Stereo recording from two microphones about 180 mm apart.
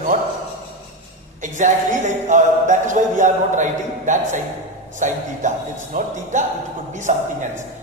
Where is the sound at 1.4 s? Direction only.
45° right (ahead or behind).